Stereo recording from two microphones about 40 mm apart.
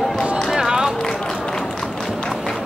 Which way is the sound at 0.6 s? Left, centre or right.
Centre.